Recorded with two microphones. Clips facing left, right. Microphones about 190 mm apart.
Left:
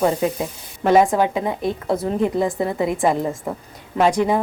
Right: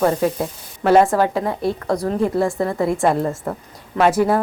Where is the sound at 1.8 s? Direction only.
5° left (ahead or behind).